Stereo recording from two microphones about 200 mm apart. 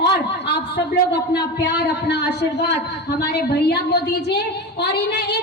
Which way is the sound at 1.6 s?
60° left (ahead or behind).